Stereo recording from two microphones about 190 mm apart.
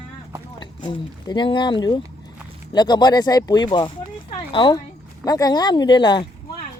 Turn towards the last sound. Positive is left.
turn(degrees=25)  # may be behind; listen again after turning